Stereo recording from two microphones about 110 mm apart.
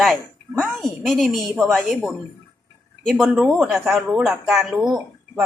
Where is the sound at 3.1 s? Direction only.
10° right (ahead or behind).